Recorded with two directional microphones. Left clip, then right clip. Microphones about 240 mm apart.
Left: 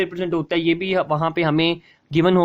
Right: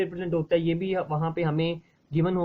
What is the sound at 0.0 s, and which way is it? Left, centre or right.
Speech, left.